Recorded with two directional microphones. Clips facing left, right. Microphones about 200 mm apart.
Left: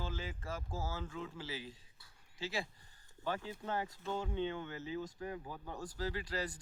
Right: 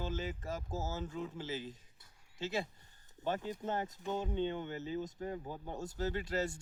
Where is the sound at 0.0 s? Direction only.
20° right (ahead or behind).